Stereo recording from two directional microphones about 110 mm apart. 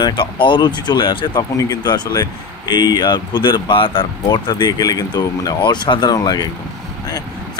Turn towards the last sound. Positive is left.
turn(degrees=35)  # may be behind; listen again after turning